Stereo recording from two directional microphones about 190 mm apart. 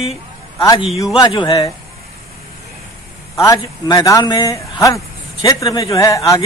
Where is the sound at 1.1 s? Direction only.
20° left (ahead or behind).